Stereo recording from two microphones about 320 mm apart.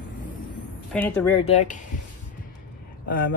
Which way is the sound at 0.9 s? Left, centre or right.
Centre.